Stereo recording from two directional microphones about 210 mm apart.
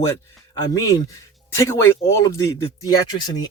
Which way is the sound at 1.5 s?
15° left (ahead or behind).